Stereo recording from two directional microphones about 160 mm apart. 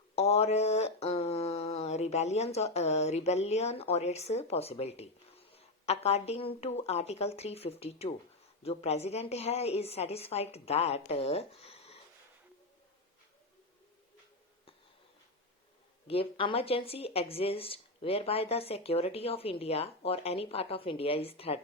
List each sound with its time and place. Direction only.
0.2 s speech: 40° left (ahead or behind)
16.0 s speech: 35° left (ahead or behind)